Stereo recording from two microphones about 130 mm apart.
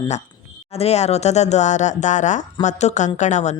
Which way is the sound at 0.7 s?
55° left (ahead or behind).